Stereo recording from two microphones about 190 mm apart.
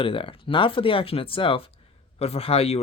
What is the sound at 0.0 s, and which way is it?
Speech, 30° left (ahead or behind).